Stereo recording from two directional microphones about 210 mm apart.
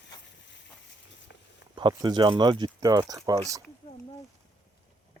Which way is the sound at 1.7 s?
20° right (ahead or behind).